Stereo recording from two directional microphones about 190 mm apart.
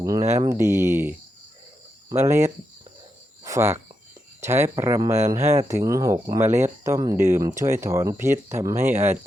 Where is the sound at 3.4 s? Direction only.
15° right (ahead or behind).